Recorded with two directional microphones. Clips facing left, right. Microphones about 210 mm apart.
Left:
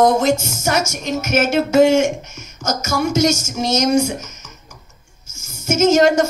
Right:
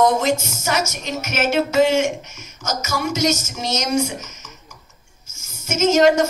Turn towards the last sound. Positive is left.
turn(degrees=50)  # may be behind; listen again after turning